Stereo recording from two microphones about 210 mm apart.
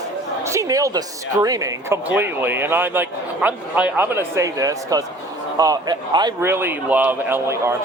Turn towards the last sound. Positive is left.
turn(degrees=-10)  # may be behind; listen again after turning